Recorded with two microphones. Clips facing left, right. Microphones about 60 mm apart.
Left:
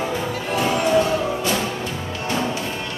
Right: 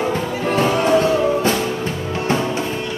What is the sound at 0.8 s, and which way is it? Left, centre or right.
Music, right.